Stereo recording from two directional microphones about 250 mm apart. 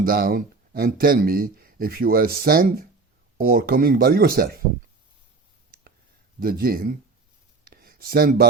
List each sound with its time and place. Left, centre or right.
0.1 s speech: right
6.4 s speech: right
7.6 s a sound: right